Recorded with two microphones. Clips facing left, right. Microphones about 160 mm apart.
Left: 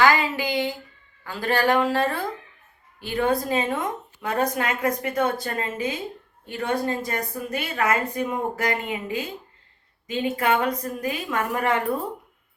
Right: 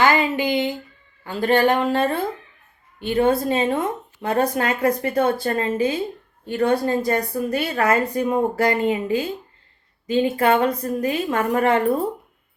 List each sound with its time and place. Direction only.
0.0 s speech: 20° right (ahead or behind)